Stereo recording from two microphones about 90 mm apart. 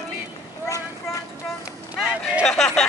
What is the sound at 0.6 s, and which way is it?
Vehicle, 35° left (ahead or behind).